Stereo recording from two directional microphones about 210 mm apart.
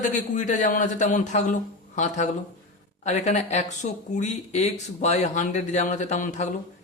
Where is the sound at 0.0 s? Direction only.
35° left (ahead or behind).